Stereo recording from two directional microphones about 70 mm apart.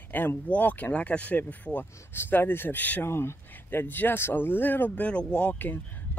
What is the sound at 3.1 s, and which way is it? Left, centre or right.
Speech, left.